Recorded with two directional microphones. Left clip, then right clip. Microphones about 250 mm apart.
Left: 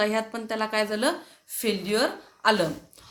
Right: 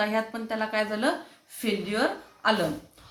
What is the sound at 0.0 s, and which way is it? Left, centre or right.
A woman's voice, left.